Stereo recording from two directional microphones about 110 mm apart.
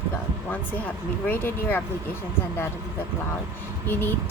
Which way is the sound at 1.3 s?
20° left (ahead or behind).